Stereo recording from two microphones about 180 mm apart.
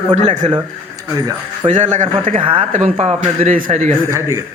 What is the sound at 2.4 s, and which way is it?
A man's voice, 30° right (ahead or behind).